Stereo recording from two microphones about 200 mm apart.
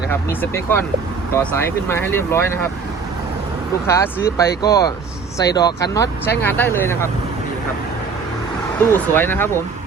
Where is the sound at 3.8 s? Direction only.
15° left (ahead or behind).